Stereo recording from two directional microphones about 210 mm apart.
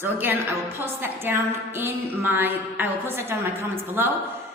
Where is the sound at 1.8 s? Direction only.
10° right (ahead or behind).